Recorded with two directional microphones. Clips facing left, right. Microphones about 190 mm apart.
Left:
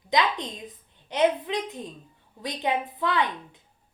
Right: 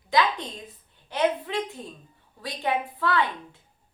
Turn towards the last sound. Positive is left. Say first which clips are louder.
# right 1 dB
turn(degrees=20)  # may be behind; listen again after turning